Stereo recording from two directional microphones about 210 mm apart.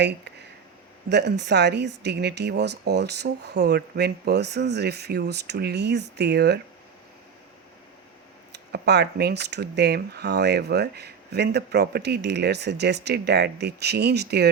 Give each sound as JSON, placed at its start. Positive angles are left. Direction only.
{"t": 1.1, "sound": "speech", "side_deg": -55}
{"t": 8.5, "sound": "speech", "side_deg": -50}